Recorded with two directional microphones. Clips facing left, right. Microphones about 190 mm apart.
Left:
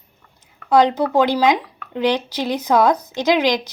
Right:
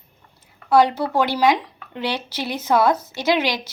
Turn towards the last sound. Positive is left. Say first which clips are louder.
# left 4 dB
turn(degrees=15)  # may be behind; listen again after turning